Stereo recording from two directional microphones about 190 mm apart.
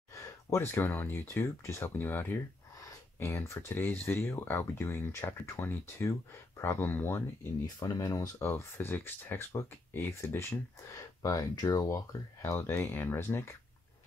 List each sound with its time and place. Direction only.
0.1 s speech: 15° left (ahead or behind)